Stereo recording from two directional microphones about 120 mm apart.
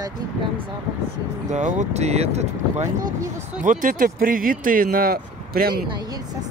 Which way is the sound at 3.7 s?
90° right.